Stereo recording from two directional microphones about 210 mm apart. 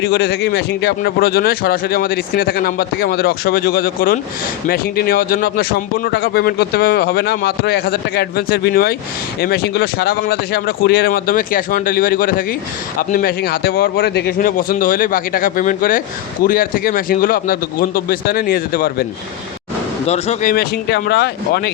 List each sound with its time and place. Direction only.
0.0 s a man's voice: 50° left (ahead or behind)
20.1 s a man's voice: 30° left (ahead or behind); by 21.7 s 50° left (ahead or behind)